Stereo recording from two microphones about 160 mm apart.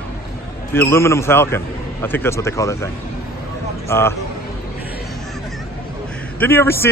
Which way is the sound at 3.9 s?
15° left (ahead or behind).